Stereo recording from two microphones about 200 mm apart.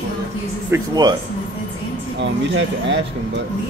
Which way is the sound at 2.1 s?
65° right (ahead or behind).